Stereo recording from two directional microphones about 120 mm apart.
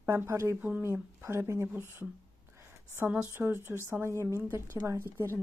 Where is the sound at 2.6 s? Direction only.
20° right (ahead or behind).